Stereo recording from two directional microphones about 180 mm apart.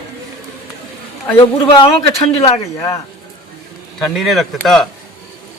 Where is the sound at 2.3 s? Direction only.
35° left (ahead or behind).